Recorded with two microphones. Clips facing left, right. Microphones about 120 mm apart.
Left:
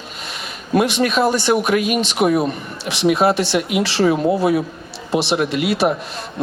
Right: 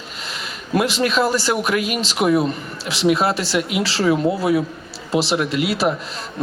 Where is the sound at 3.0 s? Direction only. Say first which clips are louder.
Left 2 dB; 20° left (ahead or behind).